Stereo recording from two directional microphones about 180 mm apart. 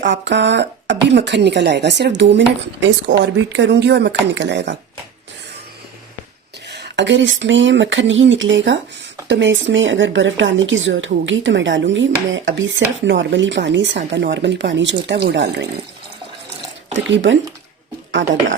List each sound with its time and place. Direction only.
0.0 s speech: 80° right
6.7 s speech: 70° right (ahead or behind); by 14.0 s 85° right
14.1 s speech: 75° right (ahead or behind)
16.9 s speech: 90° right